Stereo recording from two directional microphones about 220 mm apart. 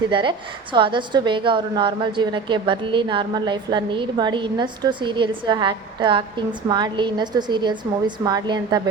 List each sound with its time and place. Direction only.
0.1 s a woman's voice: 20° right (ahead or behind)